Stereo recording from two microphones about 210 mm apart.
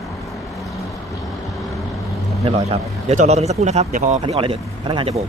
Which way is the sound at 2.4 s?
30° right (ahead or behind).